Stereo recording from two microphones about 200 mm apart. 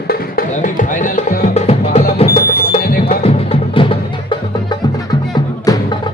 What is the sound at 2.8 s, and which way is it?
Music, 50° left (ahead or behind).